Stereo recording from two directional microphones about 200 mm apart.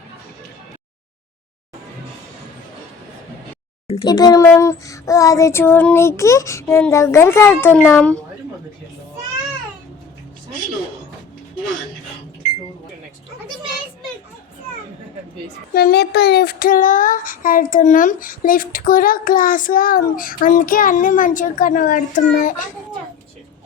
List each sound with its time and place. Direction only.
4.0 s speech: 20° left (ahead or behind)
15.7 s child singing: 50° left (ahead or behind)